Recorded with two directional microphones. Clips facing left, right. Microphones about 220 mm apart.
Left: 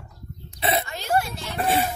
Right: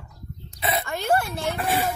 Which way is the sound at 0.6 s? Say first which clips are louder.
Left 2 dB; 30° left (ahead or behind).